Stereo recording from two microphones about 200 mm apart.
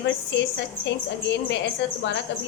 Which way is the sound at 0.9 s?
60° left (ahead or behind).